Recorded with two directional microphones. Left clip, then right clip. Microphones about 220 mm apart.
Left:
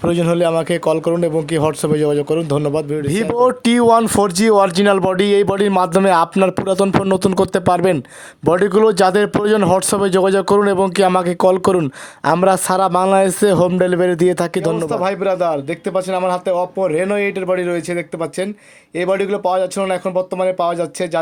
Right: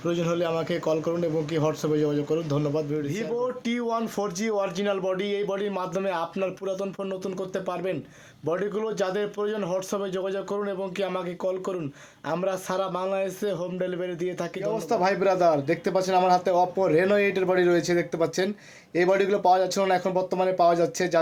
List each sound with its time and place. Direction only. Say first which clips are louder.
0.0 s a man's voice: left 11 dB; 50° left (ahead or behind)
14.8 s speech: left 5 dB; 20° left (ahead or behind)